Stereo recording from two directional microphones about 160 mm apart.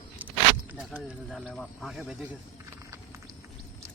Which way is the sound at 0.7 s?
5° right (ahead or behind).